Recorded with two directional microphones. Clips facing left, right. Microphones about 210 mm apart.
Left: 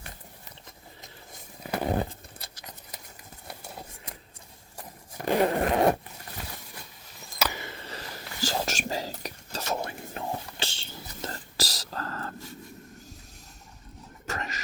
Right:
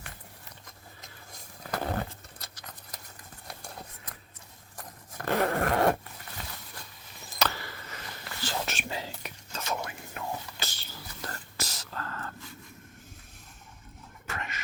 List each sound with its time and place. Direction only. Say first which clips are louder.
1.6 s a sound: left 4 dB; 15° left (ahead or behind)
4.8 s dog: left 3 dB; 15° left (ahead or behind)
7.3 s chop: even; 10° left (ahead or behind)
7.6 s whispering: left 4 dB; 25° left (ahead or behind)
11.5 s whispering: left 4 dB; 35° left (ahead or behind)
14.3 s a sound: left 4 dB; 40° left (ahead or behind)